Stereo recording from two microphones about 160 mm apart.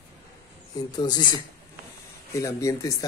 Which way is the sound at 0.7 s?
25° left (ahead or behind).